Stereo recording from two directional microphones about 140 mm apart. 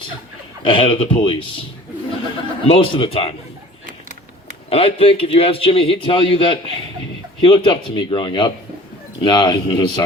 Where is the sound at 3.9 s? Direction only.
75° right (ahead or behind).